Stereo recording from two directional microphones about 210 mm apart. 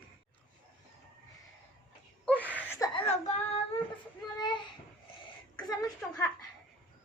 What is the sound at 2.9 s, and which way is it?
Female singing, 30° left (ahead or behind).